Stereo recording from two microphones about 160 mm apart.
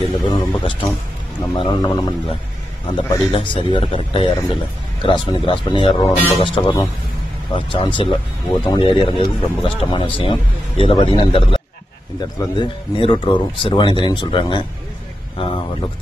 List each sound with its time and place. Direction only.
0.3 s speech: 25° left (ahead or behind)